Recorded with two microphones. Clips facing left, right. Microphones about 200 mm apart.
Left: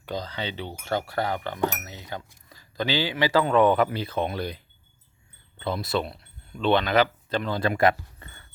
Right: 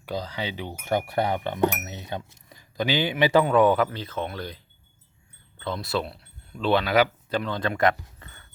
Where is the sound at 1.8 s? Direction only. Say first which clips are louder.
Right 3 dB; 20° right (ahead or behind).